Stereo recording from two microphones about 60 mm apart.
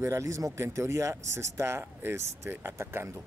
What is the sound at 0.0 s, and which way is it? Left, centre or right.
Speech, right.